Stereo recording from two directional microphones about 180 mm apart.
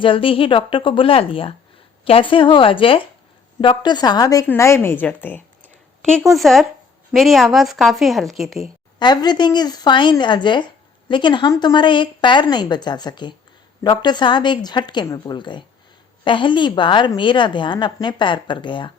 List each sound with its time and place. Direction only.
0.0 s a woman's voice: 30° left (ahead or behind); by 8.7 s centre (ahead or behind)
9.0 s a woman's voice: 25° left (ahead or behind)